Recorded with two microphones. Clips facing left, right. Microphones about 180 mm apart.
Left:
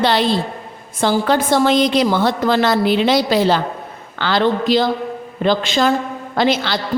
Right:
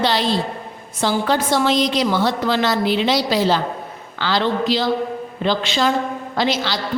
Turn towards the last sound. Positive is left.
turn(degrees=55)  # may be behind; listen again after turning